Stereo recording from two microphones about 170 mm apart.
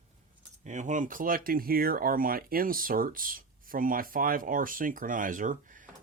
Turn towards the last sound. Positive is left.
turn(degrees=-50)  # may be behind; listen again after turning